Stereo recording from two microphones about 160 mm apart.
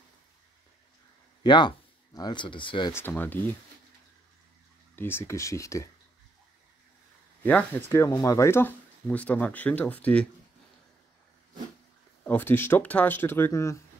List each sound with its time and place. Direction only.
1.4 s speech: 30° left (ahead or behind)
2.9 s speech: 10° left (ahead or behind)
4.9 s speech: 15° left (ahead or behind)
7.4 s speech: 10° left (ahead or behind)
12.3 s speech: 10° left (ahead or behind)